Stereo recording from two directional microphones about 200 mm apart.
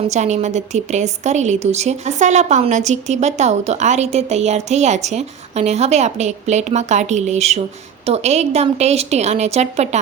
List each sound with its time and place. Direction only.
0.1 s a woman's voice: 35° right (ahead or behind)